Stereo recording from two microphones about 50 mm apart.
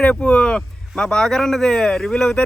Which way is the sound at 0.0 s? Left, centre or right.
Left.